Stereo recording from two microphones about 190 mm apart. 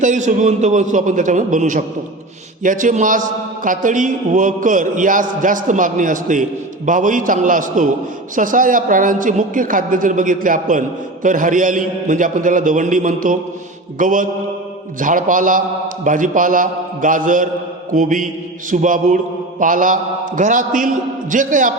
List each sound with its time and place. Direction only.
0.0 s a man's voice: 40° right (ahead or behind)